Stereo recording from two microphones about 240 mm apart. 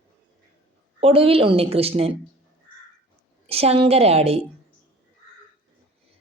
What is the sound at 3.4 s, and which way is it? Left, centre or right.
Speech, right.